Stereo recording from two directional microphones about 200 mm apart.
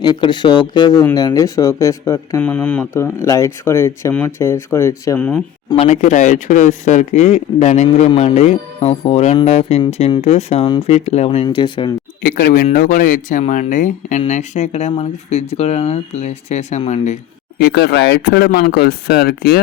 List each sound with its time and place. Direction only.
0.0 s speech: 20° left (ahead or behind)
2.4 s speech: 5° left (ahead or behind)
5.6 s speech: 30° left (ahead or behind)
12.2 s speech: 45° left (ahead or behind)
17.6 s speech: 55° left (ahead or behind)